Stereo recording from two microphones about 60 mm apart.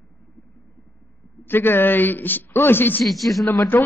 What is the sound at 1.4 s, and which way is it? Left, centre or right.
A man's voice, left.